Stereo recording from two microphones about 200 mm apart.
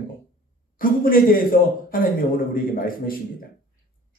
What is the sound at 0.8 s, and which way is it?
Speech, 45° left (ahead or behind).